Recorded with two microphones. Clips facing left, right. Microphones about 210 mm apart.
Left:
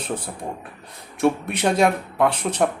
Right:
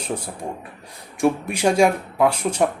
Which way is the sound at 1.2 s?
5° right (ahead or behind).